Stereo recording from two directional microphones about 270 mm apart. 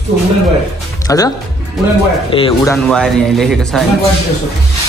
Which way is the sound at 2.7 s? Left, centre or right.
Centre.